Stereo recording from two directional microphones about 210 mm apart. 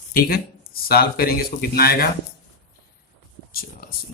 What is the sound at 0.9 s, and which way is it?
A man's voice, 45° left (ahead or behind).